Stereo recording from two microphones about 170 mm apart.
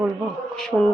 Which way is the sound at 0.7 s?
15° right (ahead or behind).